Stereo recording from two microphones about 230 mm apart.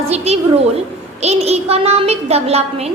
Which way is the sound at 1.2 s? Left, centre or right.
Right.